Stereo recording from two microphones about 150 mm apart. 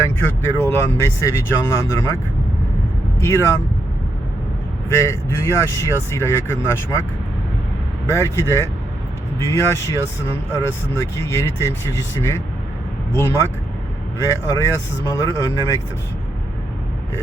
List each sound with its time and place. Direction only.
0.2 s speech: 15° left (ahead or behind)
3.2 s speech: 15° left (ahead or behind)
4.9 s speech: 20° left (ahead or behind)
8.1 s speech: 20° left (ahead or behind)
14.2 s speech: 20° left (ahead or behind)